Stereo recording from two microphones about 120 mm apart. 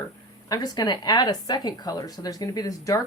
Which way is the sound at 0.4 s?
35° left (ahead or behind).